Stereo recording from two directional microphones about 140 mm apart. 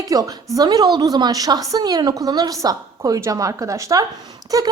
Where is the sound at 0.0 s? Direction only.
25° right (ahead or behind).